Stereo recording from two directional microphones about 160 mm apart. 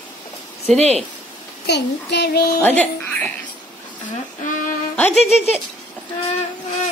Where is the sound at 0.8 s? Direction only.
40° right (ahead or behind).